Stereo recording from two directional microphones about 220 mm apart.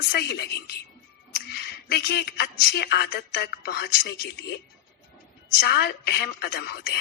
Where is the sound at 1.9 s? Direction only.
45° left (ahead or behind).